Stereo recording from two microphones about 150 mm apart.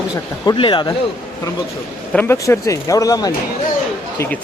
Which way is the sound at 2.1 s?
20° left (ahead or behind).